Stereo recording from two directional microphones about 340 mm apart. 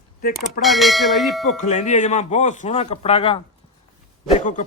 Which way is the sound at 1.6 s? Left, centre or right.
Left.